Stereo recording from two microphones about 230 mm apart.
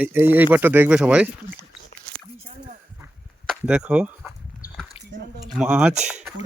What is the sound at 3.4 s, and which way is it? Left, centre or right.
Speech, centre.